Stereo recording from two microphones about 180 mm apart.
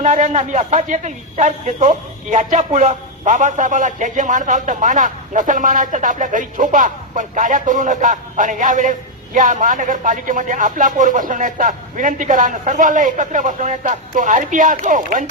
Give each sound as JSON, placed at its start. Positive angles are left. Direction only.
{"t": 0.0, "sound": "a man's voice", "side_deg": -40}